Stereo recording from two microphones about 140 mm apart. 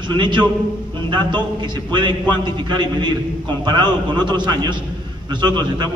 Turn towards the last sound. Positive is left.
turn(degrees=-30)  # may be behind; listen again after turning